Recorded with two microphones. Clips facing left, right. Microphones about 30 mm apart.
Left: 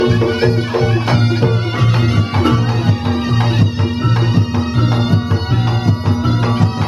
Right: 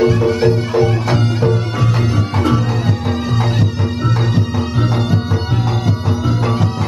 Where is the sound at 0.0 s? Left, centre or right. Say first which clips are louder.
Right 1 dB; left.